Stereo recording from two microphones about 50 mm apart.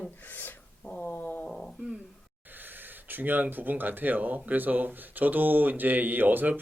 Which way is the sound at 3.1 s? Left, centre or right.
Right.